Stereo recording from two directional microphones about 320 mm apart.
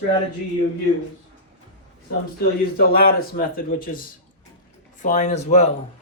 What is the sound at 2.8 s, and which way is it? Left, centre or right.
Speech, left.